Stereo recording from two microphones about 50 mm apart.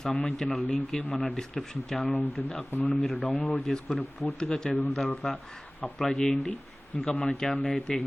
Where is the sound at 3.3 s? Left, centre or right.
Left.